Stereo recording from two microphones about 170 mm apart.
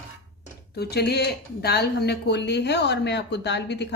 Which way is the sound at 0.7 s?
75° left (ahead or behind).